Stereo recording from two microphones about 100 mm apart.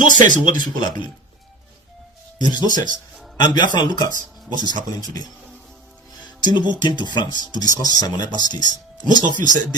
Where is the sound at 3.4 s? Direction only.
50° left (ahead or behind).